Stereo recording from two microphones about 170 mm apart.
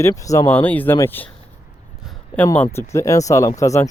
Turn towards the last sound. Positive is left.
turn(degrees=15)  # may be behind; listen again after turning